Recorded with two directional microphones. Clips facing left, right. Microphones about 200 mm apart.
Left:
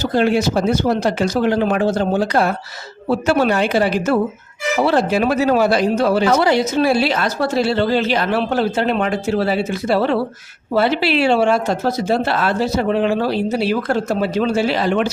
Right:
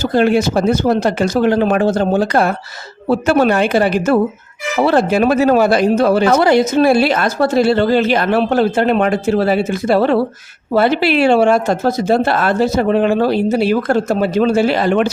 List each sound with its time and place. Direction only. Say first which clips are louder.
0.0 s speech: right 3 dB; 50° right (ahead or behind)